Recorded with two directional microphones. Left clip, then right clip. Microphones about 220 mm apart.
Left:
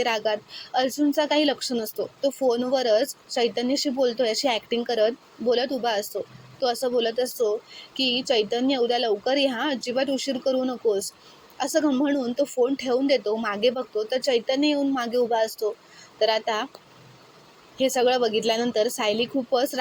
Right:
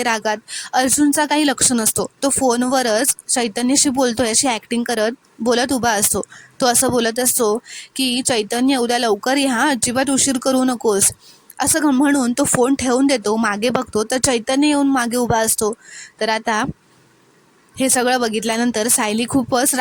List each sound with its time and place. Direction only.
0.0 s speech: 50° right (ahead or behind)
17.7 s speech: 50° right (ahead or behind)